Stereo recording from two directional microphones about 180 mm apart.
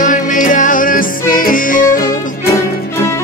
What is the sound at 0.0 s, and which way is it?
Music, 45° left (ahead or behind).